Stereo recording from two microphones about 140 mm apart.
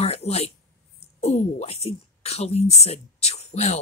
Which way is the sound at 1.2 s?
50° left (ahead or behind).